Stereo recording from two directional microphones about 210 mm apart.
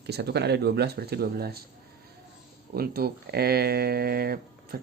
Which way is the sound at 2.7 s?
45° right (ahead or behind).